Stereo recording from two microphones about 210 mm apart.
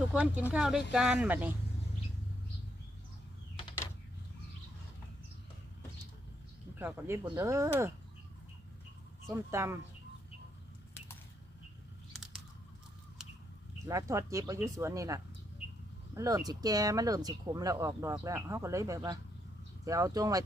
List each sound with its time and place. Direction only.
0.1 s speech: 5° right (ahead or behind)
6.7 s speech: 10° right (ahead or behind)
9.2 s speech: 15° right (ahead or behind)
13.8 s speech: 15° right (ahead or behind)